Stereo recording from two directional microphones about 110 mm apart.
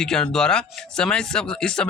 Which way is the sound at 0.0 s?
5° left (ahead or behind).